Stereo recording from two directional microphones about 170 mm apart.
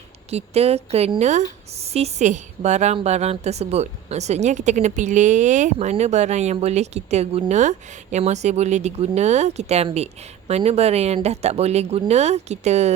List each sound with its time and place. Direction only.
0.3 s a woman's voice: 40° right (ahead or behind)